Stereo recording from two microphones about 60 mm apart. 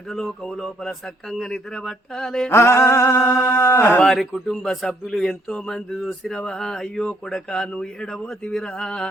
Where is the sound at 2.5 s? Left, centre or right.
Left.